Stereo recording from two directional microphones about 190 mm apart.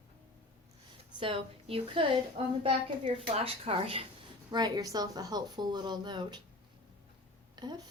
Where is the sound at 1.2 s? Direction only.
30° right (ahead or behind).